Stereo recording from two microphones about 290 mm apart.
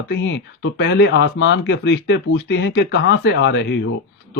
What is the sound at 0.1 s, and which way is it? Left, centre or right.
Speech, left.